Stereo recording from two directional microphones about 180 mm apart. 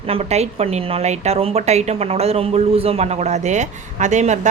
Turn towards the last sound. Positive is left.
turn(degrees=-40)  # may be behind; listen again after turning